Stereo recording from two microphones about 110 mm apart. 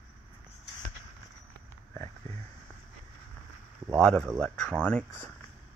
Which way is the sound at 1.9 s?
25° left (ahead or behind).